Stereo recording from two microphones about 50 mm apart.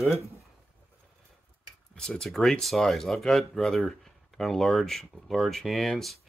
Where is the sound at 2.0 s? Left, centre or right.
Centre.